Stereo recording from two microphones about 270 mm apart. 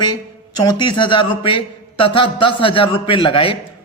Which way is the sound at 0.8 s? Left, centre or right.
Centre.